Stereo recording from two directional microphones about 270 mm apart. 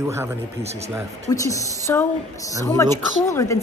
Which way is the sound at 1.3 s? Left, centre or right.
Centre.